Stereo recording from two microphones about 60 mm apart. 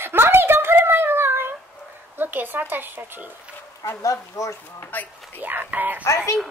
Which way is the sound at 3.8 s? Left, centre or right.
Left.